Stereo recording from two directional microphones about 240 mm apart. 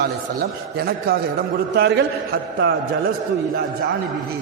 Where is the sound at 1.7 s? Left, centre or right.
Right.